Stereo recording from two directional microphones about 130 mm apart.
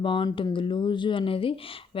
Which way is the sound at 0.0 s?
40° left (ahead or behind).